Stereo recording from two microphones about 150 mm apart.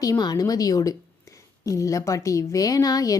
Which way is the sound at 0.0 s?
25° left (ahead or behind).